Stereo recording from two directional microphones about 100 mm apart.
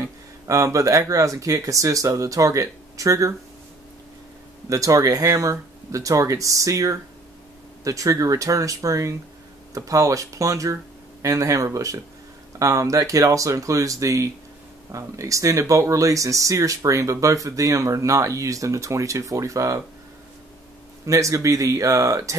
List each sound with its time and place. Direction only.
0.0 s speech: 30° right (ahead or behind)
4.6 s speech: 35° right (ahead or behind)
21.0 s speech: 35° right (ahead or behind)